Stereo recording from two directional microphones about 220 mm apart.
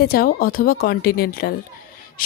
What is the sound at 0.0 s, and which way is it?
A woman's voice, 45° left (ahead or behind).